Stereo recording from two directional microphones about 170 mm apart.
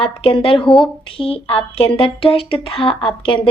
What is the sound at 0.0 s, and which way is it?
A woman's voice, 35° left (ahead or behind).